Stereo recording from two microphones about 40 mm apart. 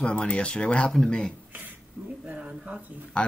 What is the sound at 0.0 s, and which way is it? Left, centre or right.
Speech, left.